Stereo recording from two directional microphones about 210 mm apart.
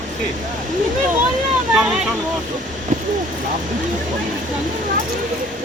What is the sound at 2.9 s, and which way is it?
Vehicle, 35° right (ahead or behind).